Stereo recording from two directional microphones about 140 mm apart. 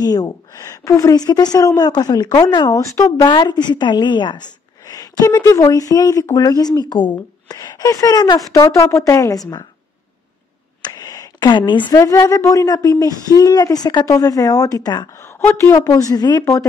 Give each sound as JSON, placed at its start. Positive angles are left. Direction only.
{"t": 0.0, "sound": "a woman's voice", "side_deg": 25}
{"t": 10.8, "sound": "a sound", "side_deg": 25}
{"t": 12.0, "sound": "speech", "side_deg": 25}
{"t": 15.2, "sound": "speech", "side_deg": 20}